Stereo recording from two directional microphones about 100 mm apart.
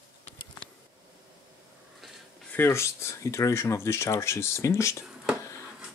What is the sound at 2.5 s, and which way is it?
Speech, 25° left (ahead or behind).